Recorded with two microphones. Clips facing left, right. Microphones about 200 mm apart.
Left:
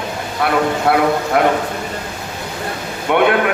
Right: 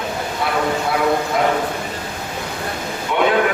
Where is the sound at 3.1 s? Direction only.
65° left (ahead or behind).